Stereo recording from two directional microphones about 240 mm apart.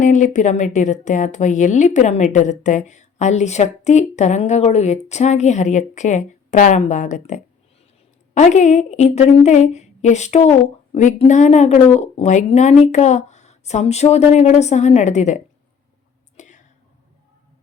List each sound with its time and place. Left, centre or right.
0.0 s a woman's voice: left
16.4 s whispering: left